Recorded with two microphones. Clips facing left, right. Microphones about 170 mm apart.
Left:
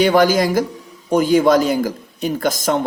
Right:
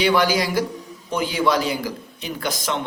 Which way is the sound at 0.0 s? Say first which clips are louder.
Left 5 dB; 45° left (ahead or behind).